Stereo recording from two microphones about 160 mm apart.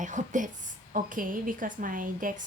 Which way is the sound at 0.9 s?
55° right (ahead or behind).